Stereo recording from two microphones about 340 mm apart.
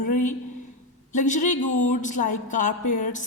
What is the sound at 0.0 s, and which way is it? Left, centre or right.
A woman's voice, left.